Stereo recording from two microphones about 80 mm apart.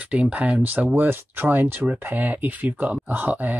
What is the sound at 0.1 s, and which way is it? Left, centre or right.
Speech, centre.